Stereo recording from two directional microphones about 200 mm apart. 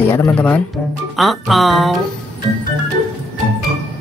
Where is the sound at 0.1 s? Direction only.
10° left (ahead or behind).